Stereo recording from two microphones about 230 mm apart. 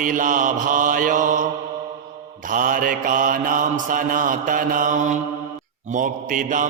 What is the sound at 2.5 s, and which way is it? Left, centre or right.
Mantra, right.